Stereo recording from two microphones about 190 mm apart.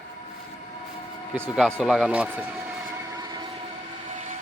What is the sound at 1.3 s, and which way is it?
Speech, 5° right (ahead or behind).